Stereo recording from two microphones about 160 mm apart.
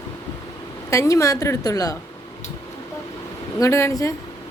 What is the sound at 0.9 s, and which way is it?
A woman's voice, 20° left (ahead or behind).